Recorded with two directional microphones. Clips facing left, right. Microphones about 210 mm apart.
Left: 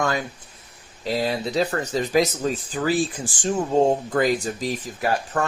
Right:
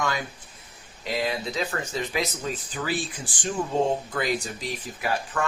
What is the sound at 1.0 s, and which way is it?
Speech, 35° left (ahead or behind).